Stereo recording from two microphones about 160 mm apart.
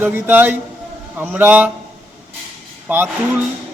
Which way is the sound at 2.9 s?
10° right (ahead or behind).